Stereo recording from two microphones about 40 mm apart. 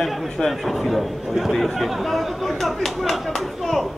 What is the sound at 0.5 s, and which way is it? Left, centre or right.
Speech, centre.